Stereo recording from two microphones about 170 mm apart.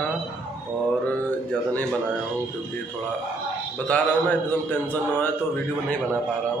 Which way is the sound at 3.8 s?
10° left (ahead or behind).